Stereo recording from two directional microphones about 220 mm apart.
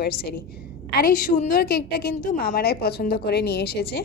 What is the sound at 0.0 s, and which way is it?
A woman's voice, 45° left (ahead or behind).